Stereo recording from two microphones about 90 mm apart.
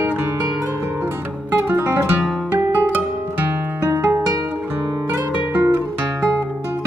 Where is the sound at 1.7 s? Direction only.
20° right (ahead or behind).